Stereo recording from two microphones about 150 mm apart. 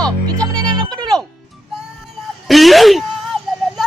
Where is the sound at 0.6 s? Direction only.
25° right (ahead or behind).